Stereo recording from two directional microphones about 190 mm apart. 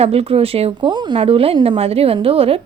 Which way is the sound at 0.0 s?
30° right (ahead or behind).